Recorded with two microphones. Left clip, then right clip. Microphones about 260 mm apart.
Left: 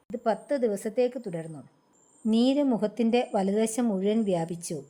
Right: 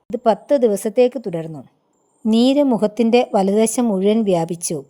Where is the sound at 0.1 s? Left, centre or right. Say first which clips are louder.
Right 12 dB; right.